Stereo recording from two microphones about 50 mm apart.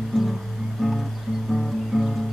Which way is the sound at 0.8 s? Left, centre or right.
Centre.